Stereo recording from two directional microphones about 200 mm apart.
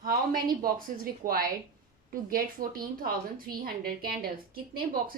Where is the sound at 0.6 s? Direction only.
45° right (ahead or behind).